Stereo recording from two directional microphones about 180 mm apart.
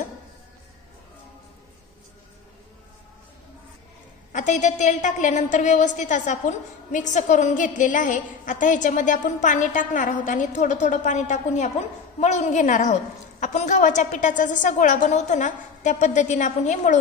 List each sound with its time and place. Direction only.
4.3 s a woman's voice: 40° left (ahead or behind)